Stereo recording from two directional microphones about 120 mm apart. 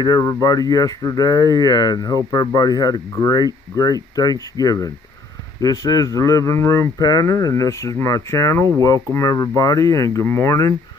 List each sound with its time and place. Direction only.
0.0 s speech: 30° left (ahead or behind)